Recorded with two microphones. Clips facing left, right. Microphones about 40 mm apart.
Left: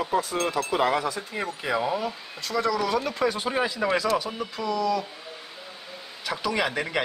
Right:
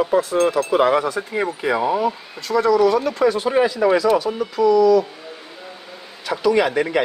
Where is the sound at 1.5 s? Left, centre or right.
Centre.